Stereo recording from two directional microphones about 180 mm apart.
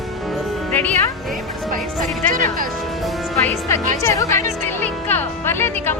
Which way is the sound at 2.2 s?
50° right (ahead or behind).